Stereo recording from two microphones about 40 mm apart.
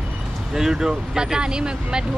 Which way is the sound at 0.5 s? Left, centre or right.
Centre.